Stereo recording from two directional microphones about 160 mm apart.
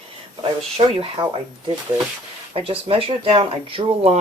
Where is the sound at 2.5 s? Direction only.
35° right (ahead or behind).